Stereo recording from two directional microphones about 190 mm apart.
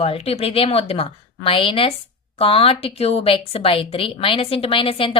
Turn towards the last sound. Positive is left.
turn(degrees=30)  # may be behind; listen again after turning